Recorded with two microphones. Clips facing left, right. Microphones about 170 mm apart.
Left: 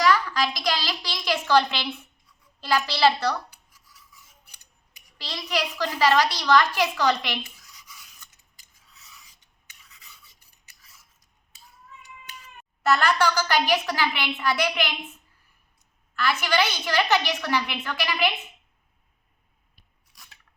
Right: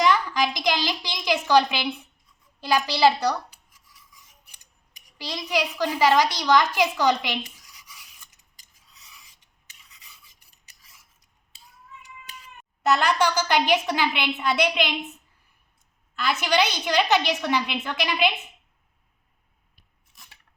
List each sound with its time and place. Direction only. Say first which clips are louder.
0.0 s a child's voice: right 1 dB; 20° right (ahead or behind)
5.1 s a child's voice: right 2 dB; 15° right (ahead or behind)
7.7 s a sound: left 1 dB; 10° right (ahead or behind)
12.8 s a woman's voice: even; 20° right (ahead or behind)
16.1 s a woman's voice: right 1 dB; 20° right (ahead or behind)